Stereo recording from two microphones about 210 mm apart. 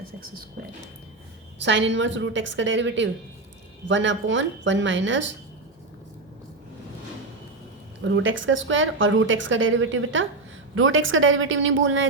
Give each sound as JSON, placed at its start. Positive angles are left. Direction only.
{"t": 1.6, "sound": "a woman's voice", "side_deg": -60}
{"t": 8.0, "sound": "a woman's voice", "side_deg": -65}